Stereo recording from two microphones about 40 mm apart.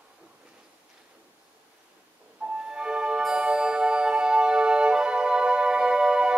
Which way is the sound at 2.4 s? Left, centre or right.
Right.